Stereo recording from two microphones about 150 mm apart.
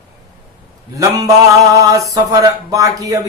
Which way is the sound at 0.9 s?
20° right (ahead or behind).